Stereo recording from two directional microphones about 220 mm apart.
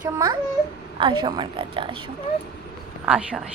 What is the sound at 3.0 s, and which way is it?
Speech, 5° right (ahead or behind).